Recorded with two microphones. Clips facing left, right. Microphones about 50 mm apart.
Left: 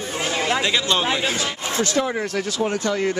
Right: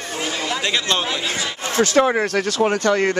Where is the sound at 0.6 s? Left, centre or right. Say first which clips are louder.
Left 1 dB; centre.